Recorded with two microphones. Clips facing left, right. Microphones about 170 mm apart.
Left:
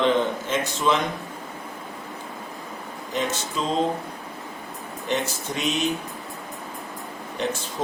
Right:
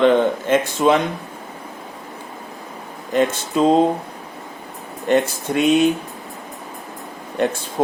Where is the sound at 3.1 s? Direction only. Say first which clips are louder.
Right 9 dB; 55° right (ahead or behind).